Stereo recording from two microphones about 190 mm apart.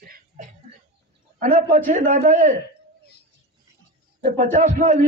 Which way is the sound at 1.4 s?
40° right (ahead or behind).